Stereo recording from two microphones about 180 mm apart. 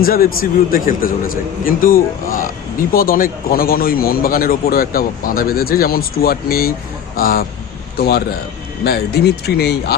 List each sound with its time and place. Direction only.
0.0 s a man's voice: 55° left (ahead or behind)